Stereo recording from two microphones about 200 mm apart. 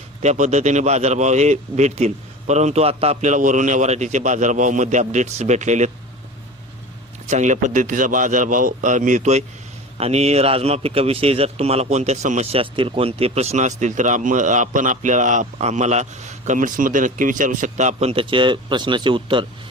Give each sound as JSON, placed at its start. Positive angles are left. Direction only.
{"t": 0.2, "sound": "a man's voice", "side_deg": -35}
{"t": 7.3, "sound": "a man's voice", "side_deg": -35}